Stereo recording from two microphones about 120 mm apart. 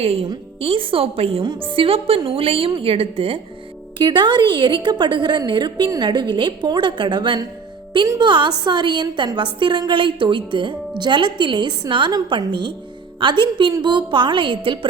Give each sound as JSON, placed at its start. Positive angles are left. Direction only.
{"t": 0.0, "sound": "a woman's voice", "side_deg": -55}
{"t": 3.9, "sound": "a woman's voice", "side_deg": -40}